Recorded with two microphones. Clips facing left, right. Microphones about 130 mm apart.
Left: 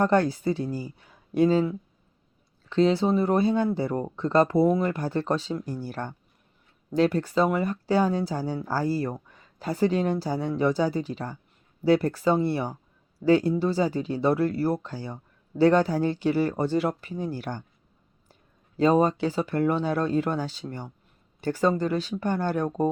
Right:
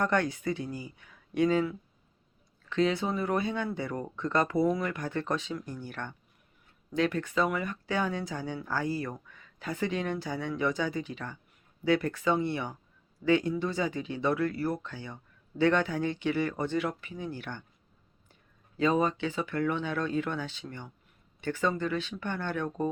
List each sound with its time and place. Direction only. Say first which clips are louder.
0.0 s speech: left 6 dB; 30° left (ahead or behind)
18.8 s speech: left 6 dB; 35° left (ahead or behind)